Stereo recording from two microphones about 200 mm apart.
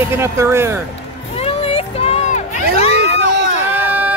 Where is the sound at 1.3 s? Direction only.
30° left (ahead or behind).